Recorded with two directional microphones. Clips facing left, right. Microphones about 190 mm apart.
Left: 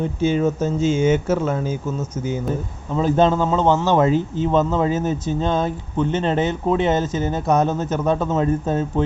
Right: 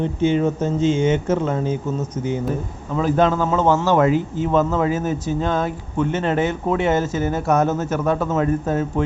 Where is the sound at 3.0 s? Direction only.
30° left (ahead or behind).